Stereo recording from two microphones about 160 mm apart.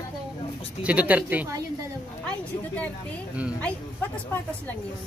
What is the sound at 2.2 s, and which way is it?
Speech, 10° left (ahead or behind).